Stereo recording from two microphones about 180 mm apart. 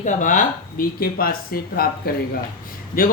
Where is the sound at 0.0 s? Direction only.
45° left (ahead or behind).